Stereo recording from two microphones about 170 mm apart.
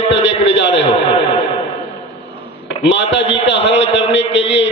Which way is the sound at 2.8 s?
90° left.